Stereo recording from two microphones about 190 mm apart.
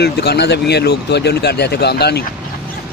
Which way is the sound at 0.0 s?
60° left (ahead or behind).